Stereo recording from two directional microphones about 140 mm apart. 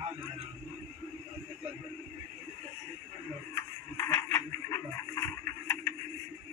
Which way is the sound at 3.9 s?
15° left (ahead or behind).